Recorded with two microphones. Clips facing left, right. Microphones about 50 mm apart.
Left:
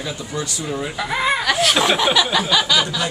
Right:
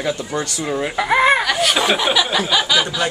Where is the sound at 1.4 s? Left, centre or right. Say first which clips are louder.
Even; centre.